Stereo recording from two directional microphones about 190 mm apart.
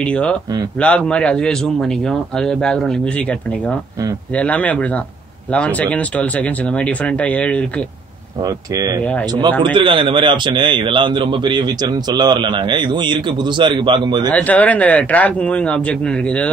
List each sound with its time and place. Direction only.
0.0 s a man's voice: 5° left (ahead or behind)
8.4 s a man's voice: 20° right (ahead or behind)
14.3 s speech: 10° left (ahead or behind)